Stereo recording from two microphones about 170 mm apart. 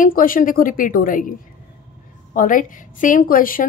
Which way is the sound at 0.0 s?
55° left (ahead or behind).